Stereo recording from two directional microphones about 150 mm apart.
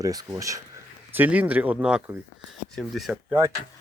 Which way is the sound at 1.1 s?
10° right (ahead or behind).